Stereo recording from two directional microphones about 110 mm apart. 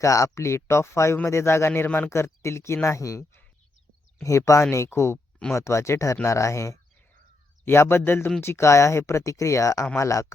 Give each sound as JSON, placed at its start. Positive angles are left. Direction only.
{"t": 0.0, "sound": "speech", "side_deg": 30}